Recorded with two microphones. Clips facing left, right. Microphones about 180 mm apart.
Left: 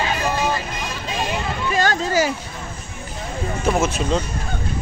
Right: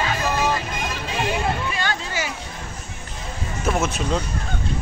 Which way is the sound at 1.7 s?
45° left (ahead or behind).